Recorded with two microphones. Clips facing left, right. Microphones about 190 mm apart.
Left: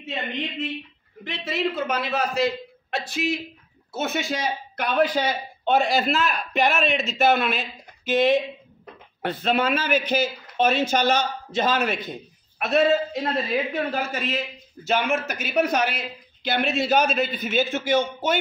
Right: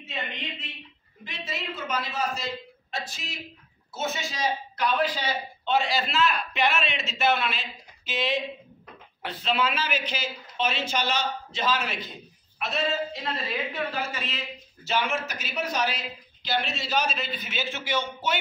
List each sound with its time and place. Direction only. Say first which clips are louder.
1.2 s a man's voice: left 9 dB; 60° left (ahead or behind)